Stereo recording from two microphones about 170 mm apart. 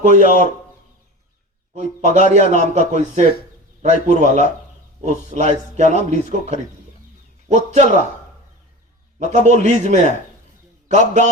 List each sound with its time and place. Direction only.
0.0 s speech: 45° right (ahead or behind)
1.7 s a man's voice: 45° right (ahead or behind)
9.1 s a man's voice: 45° right (ahead or behind)